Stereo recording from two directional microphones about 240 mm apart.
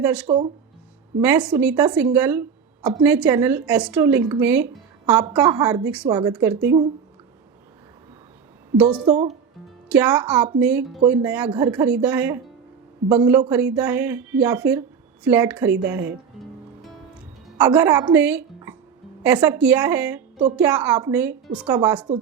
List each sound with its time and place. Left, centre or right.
0.0 s a woman's voice: centre
0.3 s speech: right
1.2 s a woman's voice: centre
6.1 s a woman's voice: centre
8.8 s a woman's voice: centre
17.6 s a woman's voice: centre
21.7 s a woman's voice: centre